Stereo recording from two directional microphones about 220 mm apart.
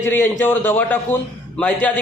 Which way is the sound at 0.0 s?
10° left (ahead or behind).